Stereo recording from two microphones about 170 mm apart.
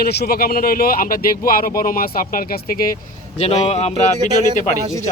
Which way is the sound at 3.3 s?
40° left (ahead or behind).